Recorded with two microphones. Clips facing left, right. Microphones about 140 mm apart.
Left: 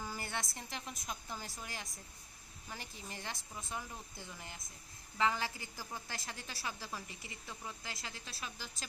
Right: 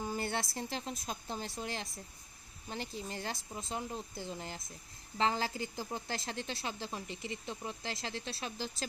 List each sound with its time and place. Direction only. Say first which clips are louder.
0.0 s a woman's voice: right 6 dB; 25° right (ahead or behind)